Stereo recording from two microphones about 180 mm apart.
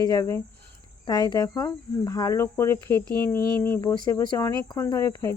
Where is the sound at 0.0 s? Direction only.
20° left (ahead or behind).